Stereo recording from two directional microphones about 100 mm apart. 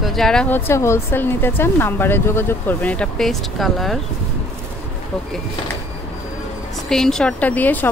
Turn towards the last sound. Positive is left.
turn(degrees=15)  # may be behind; listen again after turning